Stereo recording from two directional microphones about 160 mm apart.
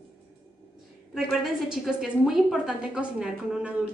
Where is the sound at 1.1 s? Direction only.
Centre (ahead or behind).